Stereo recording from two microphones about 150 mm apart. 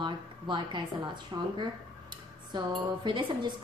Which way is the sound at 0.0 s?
30° right (ahead or behind).